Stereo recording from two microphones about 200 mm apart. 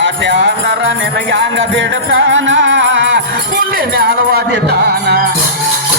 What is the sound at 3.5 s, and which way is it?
Music, 45° right (ahead or behind).